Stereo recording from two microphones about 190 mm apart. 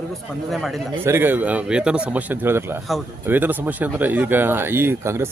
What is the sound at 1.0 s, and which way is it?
Speech, 10° right (ahead or behind).